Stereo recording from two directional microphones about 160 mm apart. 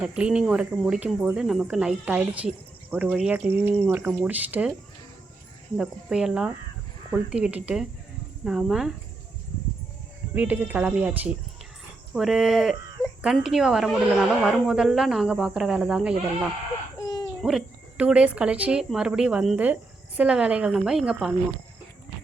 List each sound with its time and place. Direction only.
0.0 s speech: 5° right (ahead or behind)
5.7 s speech: 5° right (ahead or behind)
10.3 s speech: 10° right (ahead or behind)
17.0 s a sound: 25° left (ahead or behind)
17.4 s speech: 5° right (ahead or behind)